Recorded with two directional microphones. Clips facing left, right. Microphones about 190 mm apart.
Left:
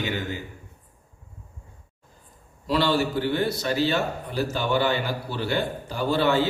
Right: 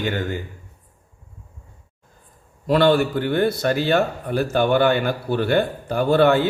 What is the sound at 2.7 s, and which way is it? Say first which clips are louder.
A man's voice: right 6 dB; 55° right (ahead or behind).